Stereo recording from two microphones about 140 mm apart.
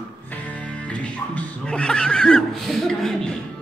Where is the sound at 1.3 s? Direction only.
5° left (ahead or behind).